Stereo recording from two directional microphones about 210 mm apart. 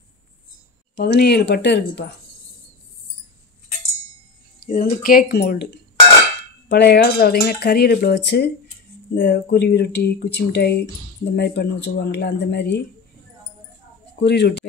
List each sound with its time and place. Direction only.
0.9 s speech: 50° left (ahead or behind)
4.6 s speech: 35° left (ahead or behind); by 12.8 s 55° left (ahead or behind)
14.2 s speech: 55° left (ahead or behind)